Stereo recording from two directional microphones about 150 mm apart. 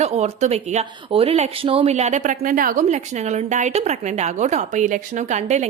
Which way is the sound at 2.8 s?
50° right (ahead or behind).